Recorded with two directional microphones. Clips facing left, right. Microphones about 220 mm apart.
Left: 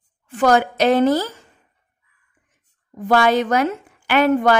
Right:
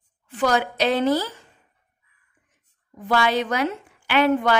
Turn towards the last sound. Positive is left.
turn(degrees=45)  # may be behind; listen again after turning